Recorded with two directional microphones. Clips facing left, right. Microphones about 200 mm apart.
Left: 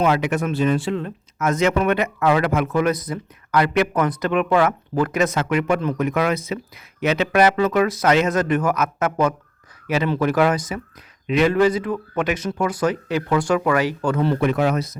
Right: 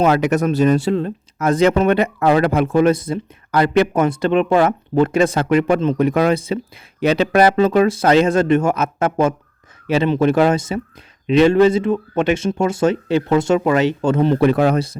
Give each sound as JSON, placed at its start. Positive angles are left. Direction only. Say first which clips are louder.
{"t": 0.0, "sound": "speech", "louder": "right 4 dB", "side_deg": -40}
{"t": 14.3, "sound": "speech", "louder": "right 5 dB", "side_deg": -35}